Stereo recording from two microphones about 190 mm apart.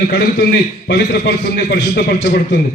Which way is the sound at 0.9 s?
65° left (ahead or behind).